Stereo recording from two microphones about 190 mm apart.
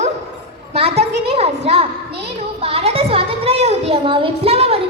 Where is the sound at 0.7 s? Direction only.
35° right (ahead or behind).